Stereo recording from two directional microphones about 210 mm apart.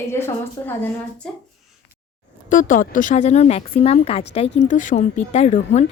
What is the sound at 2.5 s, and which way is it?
Speech, 40° left (ahead or behind).